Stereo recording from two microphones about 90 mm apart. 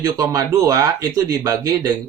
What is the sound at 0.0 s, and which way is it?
Speech, 40° right (ahead or behind).